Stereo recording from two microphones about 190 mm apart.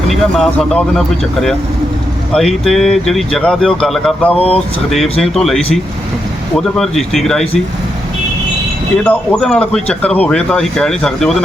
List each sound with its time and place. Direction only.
0.1 s speech: centre (ahead or behind)
4.4 s speech: 30° left (ahead or behind)
5.2 s speech: centre (ahead or behind)
6.6 s speech: centre (ahead or behind)
9.0 s speech: 5° left (ahead or behind)